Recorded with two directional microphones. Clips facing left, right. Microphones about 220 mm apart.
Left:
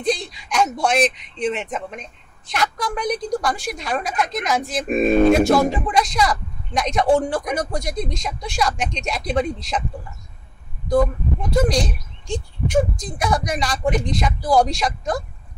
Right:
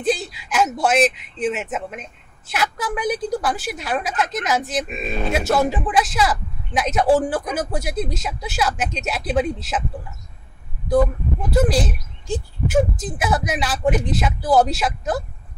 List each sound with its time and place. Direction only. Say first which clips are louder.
0.0 s speech: right 1 dB; 5° right (ahead or behind)
4.8 s speech: left 11 dB; 50° left (ahead or behind)
5.3 s speech: left 4 dB; 5° right (ahead or behind)
11.5 s speech: right 1 dB; 5° right (ahead or behind)